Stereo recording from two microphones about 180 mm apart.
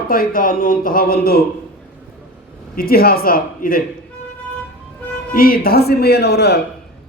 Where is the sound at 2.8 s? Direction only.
55° left (ahead or behind).